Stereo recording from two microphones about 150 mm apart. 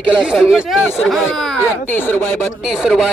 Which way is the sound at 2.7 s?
Centre (ahead or behind).